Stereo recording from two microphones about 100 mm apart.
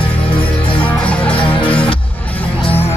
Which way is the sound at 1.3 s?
60° left (ahead or behind).